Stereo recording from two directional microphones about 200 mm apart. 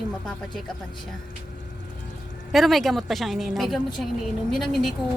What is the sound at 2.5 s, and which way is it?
A woman's voice, centre (ahead or behind).